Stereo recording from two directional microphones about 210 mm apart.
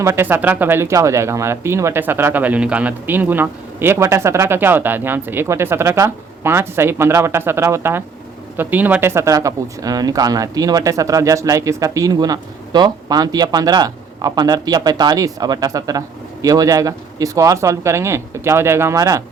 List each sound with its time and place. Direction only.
0.0 s speech: 10° right (ahead or behind)